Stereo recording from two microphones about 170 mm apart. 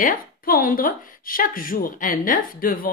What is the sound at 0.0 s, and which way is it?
Speech, 55° left (ahead or behind).